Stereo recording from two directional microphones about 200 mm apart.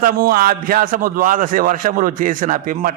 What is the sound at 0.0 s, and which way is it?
A man's voice, 45° right (ahead or behind).